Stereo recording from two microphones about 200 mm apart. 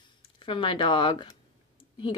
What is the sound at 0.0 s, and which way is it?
A woman's voice, 25° left (ahead or behind).